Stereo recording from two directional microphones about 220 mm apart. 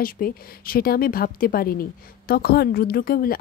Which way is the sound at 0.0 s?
40° left (ahead or behind).